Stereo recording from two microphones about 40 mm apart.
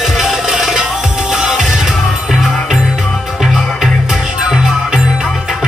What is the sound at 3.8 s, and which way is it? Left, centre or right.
Music, centre.